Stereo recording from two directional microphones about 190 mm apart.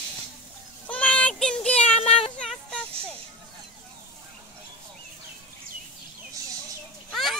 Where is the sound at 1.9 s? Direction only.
35° left (ahead or behind).